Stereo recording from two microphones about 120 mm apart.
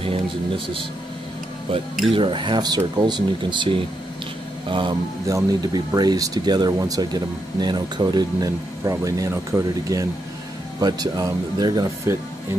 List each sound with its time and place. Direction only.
2.1 s speech: 45° right (ahead or behind)
5.2 s speech: 30° right (ahead or behind)